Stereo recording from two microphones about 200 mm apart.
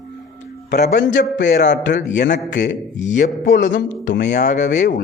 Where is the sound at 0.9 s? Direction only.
60° left (ahead or behind).